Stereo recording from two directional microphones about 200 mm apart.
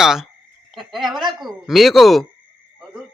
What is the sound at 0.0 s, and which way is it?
Speech, centre (ahead or behind).